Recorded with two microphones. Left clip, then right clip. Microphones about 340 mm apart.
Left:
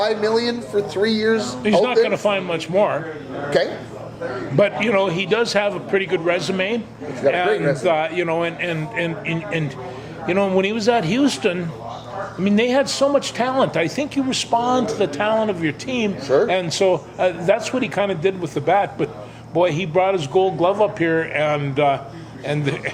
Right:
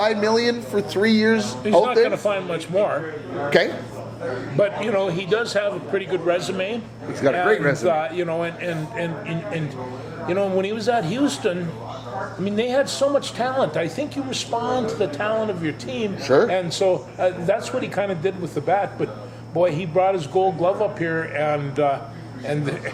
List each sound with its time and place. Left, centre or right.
0.0 s speech: right
1.6 s a man's voice: left
3.5 s speech: right
4.5 s a man's voice: left
7.4 s a man's voice: right
7.9 s a man's voice: left
16.2 s a man's voice: right
16.5 s a man's voice: left